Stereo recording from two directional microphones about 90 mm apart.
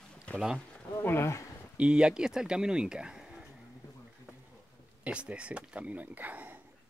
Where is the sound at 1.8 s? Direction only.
10° right (ahead or behind).